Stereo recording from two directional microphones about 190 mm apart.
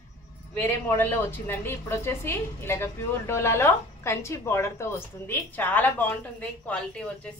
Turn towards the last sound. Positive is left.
turn(degrees=5)  # may be behind; listen again after turning